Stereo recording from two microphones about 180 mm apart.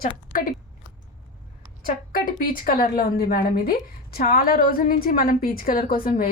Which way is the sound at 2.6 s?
55° left (ahead or behind).